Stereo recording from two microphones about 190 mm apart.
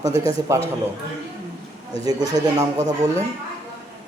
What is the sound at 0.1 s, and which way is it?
Speech, 15° right (ahead or behind).